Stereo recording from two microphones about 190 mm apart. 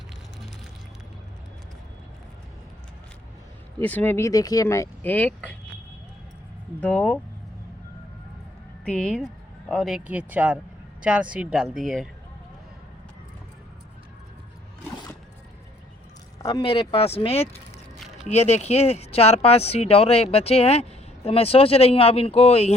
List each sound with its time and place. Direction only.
3.8 s speech: 10° left (ahead or behind)
6.7 s speech: 5° left (ahead or behind)
8.8 s speech: 5° left (ahead or behind)
16.5 s speech: 30° left (ahead or behind)